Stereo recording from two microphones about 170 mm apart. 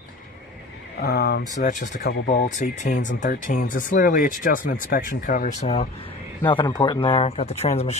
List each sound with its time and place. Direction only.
0.9 s speech: 70° left (ahead or behind)
1.6 s speech: 45° left (ahead or behind)
2.0 s speech: 80° left
2.4 s speech: 45° left (ahead or behind)
6.4 s speech: 30° left (ahead or behind)